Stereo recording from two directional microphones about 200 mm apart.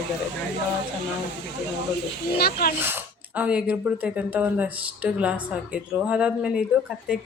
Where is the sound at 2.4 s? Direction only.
50° left (ahead or behind).